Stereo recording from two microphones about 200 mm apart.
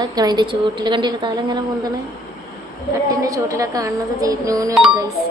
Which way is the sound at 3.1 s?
15° right (ahead or behind).